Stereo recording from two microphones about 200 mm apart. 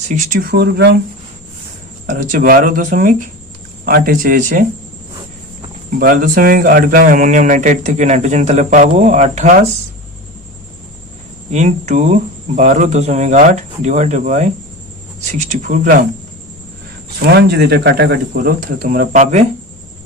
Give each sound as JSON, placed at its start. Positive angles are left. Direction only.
{"t": 0.1, "sound": "speech", "side_deg": -40}
{"t": 2.0, "sound": "speech", "side_deg": -40}
{"t": 6.0, "sound": "speech", "side_deg": -45}
{"t": 11.5, "sound": "speech", "side_deg": -35}
{"t": 17.3, "sound": "speech", "side_deg": -55}